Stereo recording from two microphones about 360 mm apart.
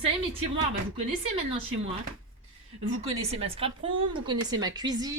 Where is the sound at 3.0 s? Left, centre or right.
Centre.